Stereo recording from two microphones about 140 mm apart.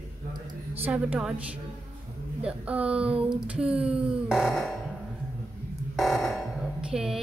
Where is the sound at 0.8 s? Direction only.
10° right (ahead or behind).